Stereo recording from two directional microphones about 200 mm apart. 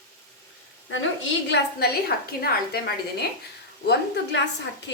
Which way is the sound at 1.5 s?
50° left (ahead or behind).